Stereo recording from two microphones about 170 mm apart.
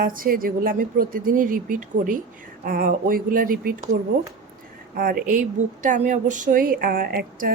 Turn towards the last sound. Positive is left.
turn(degrees=-60)  # may be behind; listen again after turning